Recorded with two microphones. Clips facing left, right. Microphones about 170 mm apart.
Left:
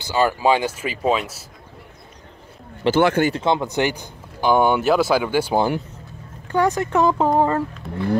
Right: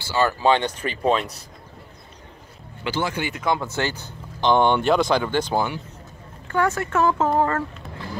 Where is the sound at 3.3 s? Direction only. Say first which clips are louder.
Left 4 dB; 25° left (ahead or behind).